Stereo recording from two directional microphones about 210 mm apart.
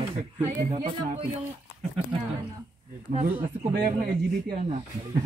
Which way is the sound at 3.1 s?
40° right (ahead or behind).